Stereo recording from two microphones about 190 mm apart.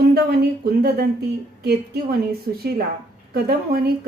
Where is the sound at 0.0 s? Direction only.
55° right (ahead or behind).